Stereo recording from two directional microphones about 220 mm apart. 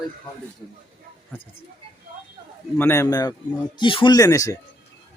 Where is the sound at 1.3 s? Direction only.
10° left (ahead or behind).